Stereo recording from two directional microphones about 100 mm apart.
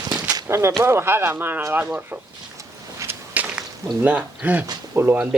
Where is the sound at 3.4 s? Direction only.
15° right (ahead or behind).